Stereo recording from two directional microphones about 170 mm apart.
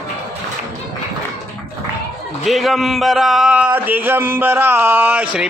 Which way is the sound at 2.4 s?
Centre (ahead or behind).